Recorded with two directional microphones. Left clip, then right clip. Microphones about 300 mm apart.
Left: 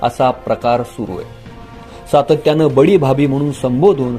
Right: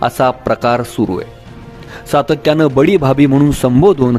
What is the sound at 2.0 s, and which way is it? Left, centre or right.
A man's voice, right.